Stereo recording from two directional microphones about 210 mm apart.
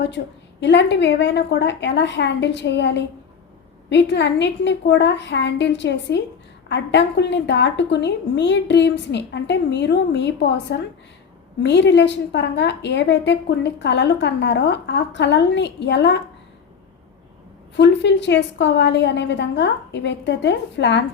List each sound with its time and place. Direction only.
0.6 s a woman's voice: 55° left (ahead or behind)
17.7 s a woman's voice: 55° left (ahead or behind)